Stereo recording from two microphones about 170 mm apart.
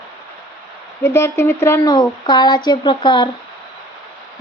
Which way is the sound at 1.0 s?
15° left (ahead or behind).